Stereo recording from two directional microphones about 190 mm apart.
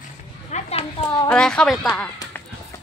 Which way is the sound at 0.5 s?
35° left (ahead or behind).